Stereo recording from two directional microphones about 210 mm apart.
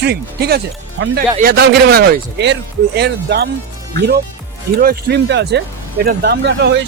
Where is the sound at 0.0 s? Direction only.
50° right (ahead or behind).